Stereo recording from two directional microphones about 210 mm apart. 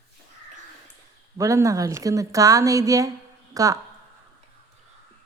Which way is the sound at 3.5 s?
15° right (ahead or behind).